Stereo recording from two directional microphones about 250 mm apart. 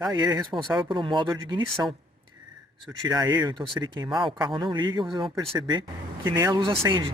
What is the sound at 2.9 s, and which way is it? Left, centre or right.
Speech, centre.